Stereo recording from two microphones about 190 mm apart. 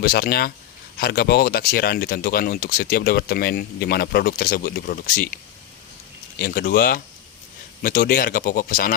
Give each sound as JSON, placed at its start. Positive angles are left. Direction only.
{"t": 0.0, "sound": "speech", "side_deg": 50}
{"t": 6.4, "sound": "speech", "side_deg": 55}